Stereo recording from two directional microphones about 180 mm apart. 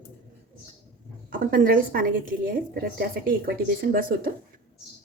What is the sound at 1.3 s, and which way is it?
A woman's voice, 50° right (ahead or behind).